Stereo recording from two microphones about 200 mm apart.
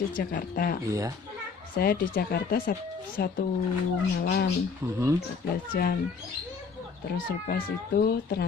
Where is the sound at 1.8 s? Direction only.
50° left (ahead or behind).